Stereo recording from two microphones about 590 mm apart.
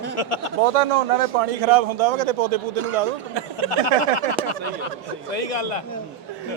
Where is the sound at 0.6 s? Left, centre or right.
Right.